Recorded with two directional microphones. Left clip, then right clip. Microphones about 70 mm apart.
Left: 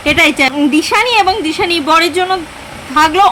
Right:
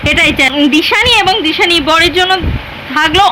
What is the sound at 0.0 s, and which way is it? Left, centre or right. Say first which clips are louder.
A woman's voice: right 1 dB; left.